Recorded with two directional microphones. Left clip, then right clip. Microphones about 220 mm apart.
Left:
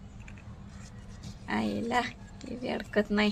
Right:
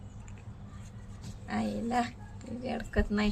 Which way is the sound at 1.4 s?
35° left (ahead or behind).